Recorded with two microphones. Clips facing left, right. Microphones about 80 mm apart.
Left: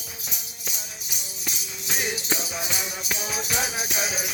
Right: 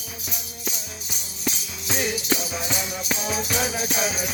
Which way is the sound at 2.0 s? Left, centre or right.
Centre.